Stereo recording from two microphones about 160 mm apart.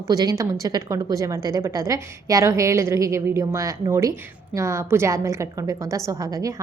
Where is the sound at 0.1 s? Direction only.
25° right (ahead or behind).